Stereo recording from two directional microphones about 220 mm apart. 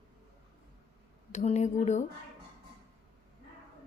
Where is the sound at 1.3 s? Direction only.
30° left (ahead or behind).